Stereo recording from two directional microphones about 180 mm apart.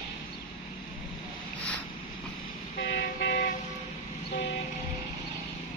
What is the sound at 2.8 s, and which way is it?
Vehicle, 65° left (ahead or behind).